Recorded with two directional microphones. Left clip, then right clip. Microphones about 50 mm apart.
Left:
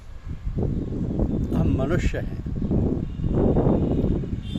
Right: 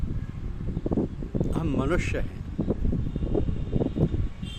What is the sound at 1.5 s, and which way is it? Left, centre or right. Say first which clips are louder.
Speech: left 2 dB; right.